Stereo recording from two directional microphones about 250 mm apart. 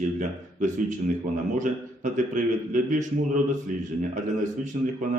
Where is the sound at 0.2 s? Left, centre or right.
Right.